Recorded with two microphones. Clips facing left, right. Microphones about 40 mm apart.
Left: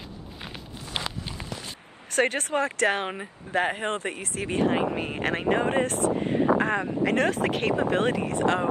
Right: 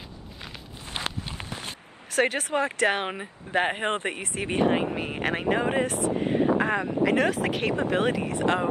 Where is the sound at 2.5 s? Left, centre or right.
Right.